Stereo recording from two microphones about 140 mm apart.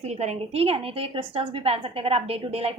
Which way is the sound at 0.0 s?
50° right (ahead or behind).